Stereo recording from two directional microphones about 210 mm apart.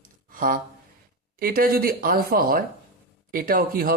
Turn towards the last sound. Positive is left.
turn(degrees=-45)  # may be behind; listen again after turning